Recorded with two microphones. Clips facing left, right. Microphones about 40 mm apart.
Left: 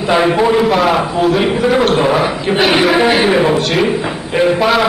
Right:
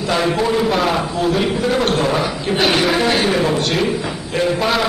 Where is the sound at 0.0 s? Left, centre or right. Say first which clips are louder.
Left 6 dB; left.